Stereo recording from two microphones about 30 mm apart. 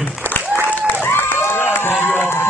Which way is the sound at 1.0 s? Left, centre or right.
Left.